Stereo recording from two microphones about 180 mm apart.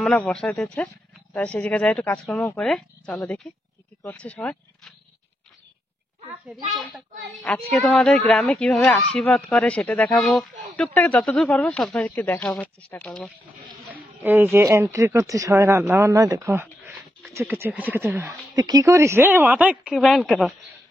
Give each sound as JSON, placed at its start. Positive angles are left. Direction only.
{"t": 0.0, "sound": "speech", "side_deg": 5}
{"t": 6.5, "sound": "speech", "side_deg": 0}
{"t": 14.2, "sound": "speech", "side_deg": -10}